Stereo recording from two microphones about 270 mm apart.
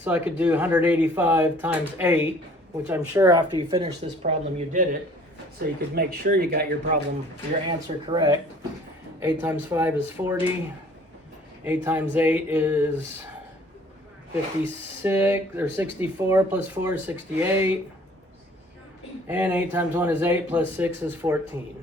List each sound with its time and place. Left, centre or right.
0.0 s speech: centre; by 7.0 s right
7.7 s speech: centre
11.6 s speech: centre
15.0 s speech: centre
19.3 s speech: centre